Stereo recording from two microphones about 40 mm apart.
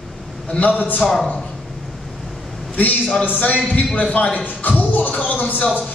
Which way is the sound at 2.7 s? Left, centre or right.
Left.